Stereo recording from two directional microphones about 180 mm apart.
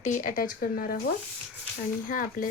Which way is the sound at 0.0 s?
45° left (ahead or behind).